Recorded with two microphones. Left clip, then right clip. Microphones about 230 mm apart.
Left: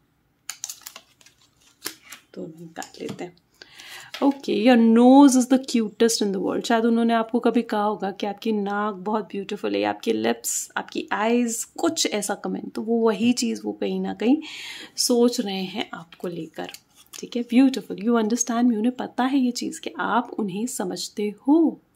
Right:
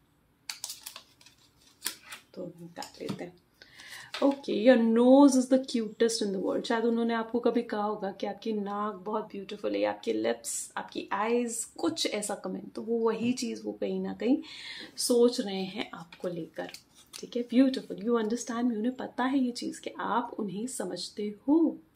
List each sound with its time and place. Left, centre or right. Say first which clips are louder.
2.3 s speech: left 6 dB; left